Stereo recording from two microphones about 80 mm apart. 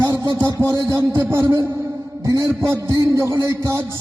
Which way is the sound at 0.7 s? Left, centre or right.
Right.